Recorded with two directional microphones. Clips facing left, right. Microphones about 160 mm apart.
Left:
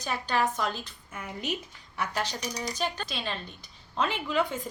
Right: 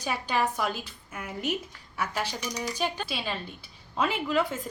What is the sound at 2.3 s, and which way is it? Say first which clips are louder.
Speech: right 1 dB; 35° left (ahead or behind).